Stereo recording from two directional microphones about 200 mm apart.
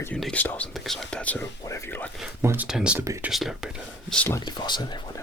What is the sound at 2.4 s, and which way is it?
Speech, 10° right (ahead or behind).